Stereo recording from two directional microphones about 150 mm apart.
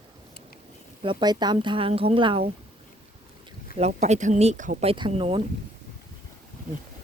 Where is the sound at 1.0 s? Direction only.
30° right (ahead or behind).